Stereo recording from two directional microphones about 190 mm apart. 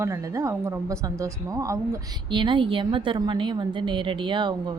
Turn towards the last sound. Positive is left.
turn(degrees=-25)  # may be behind; listen again after turning